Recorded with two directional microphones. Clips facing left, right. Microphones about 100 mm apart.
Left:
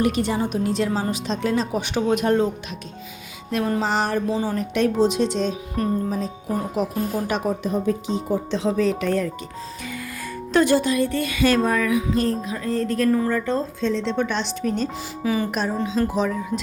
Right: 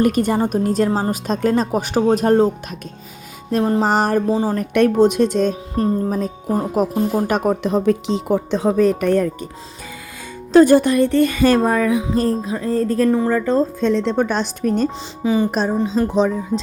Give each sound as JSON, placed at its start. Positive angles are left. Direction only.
{"t": 0.0, "sound": "speech", "side_deg": -50}
{"t": 3.5, "sound": "music", "side_deg": -35}
{"t": 3.8, "sound": "speech", "side_deg": -45}
{"t": 4.7, "sound": "speech", "side_deg": -55}
{"t": 7.6, "sound": "speech", "side_deg": -80}
{"t": 8.4, "sound": "speech", "side_deg": -50}
{"t": 10.5, "sound": "music", "side_deg": -45}
{"t": 13.2, "sound": "music", "side_deg": -35}
{"t": 13.8, "sound": "speech", "side_deg": -55}
{"t": 15.2, "sound": "speech", "side_deg": -25}
{"t": 15.5, "sound": "music", "side_deg": -35}
{"t": 16.1, "sound": "speech", "side_deg": -30}